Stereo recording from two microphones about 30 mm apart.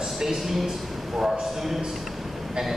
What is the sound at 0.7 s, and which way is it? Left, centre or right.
Speech, centre.